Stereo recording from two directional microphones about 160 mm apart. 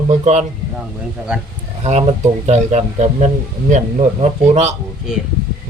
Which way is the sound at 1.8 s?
45° right (ahead or behind).